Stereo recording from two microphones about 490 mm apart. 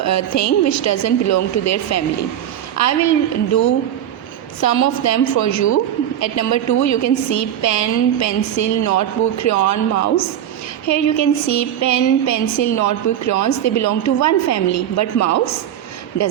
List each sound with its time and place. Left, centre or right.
0.0 s a woman's voice: left
4.6 s a woman's voice: left